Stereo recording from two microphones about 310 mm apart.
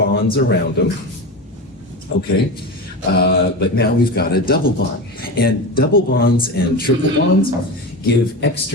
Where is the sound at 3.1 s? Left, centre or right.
Left.